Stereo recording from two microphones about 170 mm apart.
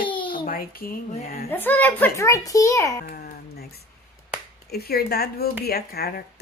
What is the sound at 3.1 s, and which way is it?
Speech, 65° left (ahead or behind).